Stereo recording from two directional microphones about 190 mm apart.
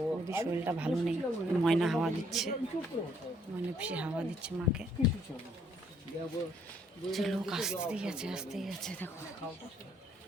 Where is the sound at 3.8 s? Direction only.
5° right (ahead or behind).